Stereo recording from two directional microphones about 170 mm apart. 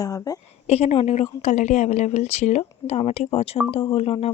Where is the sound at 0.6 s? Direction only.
40° left (ahead or behind).